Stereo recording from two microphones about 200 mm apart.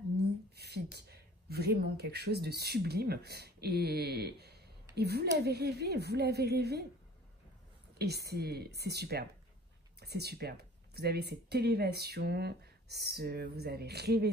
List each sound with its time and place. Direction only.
0.6 s a woman's voice: 55° right (ahead or behind)
8.0 s a woman's voice: 55° right (ahead or behind)